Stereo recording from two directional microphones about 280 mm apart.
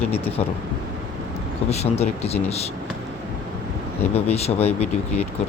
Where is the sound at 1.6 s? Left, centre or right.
Left.